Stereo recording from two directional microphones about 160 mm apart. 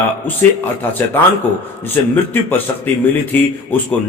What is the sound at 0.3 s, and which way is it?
A man's voice, 10° left (ahead or behind).